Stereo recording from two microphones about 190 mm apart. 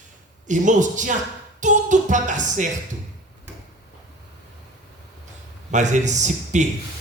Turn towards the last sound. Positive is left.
turn(degrees=-40)  # may be behind; listen again after turning